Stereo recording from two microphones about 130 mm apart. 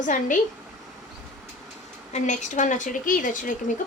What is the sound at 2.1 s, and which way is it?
A woman's voice, 65° left (ahead or behind).